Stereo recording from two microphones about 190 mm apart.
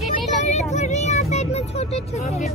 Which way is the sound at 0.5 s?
35° left (ahead or behind).